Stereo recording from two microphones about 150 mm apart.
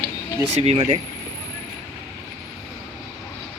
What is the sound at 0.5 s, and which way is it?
Speech, 40° right (ahead or behind).